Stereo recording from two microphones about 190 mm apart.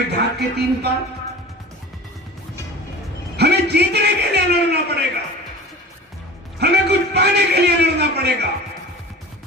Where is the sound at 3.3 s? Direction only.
60° right (ahead or behind).